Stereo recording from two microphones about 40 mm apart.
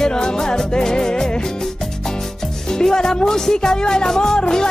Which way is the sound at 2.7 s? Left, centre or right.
Centre.